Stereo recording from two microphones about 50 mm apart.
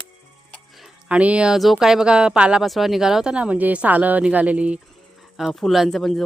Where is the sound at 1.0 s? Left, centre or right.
Right.